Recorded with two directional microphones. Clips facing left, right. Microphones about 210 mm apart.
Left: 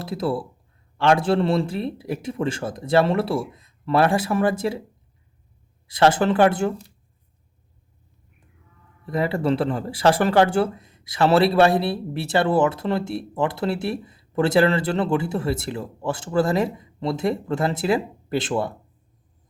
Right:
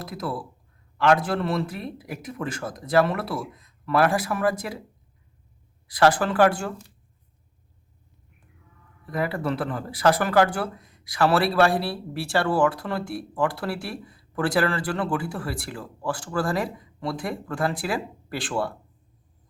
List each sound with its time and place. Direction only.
0.0 s speech: 30° left (ahead or behind)
5.9 s speech: 25° left (ahead or behind)
9.0 s speech: 25° left (ahead or behind)